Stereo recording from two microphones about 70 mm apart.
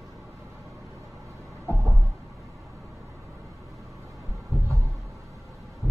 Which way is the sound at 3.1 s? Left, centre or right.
Right.